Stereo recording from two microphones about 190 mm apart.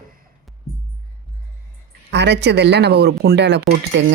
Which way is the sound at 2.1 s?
65° right (ahead or behind).